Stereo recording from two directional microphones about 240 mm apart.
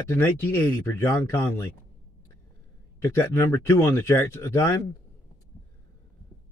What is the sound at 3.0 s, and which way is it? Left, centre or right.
Speech, centre.